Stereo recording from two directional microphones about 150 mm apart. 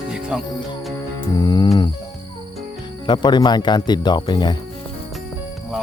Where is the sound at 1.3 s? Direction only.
30° left (ahead or behind).